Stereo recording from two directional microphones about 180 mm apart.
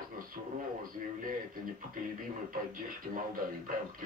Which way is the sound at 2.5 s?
50° right (ahead or behind).